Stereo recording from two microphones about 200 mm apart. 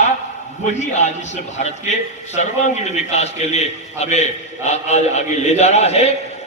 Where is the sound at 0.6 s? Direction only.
35° left (ahead or behind).